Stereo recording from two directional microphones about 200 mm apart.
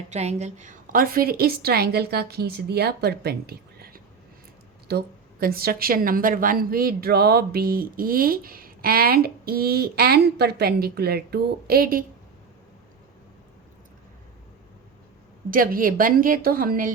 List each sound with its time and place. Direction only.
0.1 s a woman's voice: 35° right (ahead or behind)
15.4 s a woman's voice: 45° right (ahead or behind)